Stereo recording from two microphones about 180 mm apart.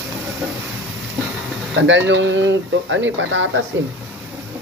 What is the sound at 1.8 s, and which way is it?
Speech, 90° right.